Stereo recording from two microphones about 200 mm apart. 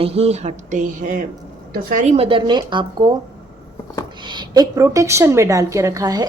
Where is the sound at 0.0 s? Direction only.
30° right (ahead or behind).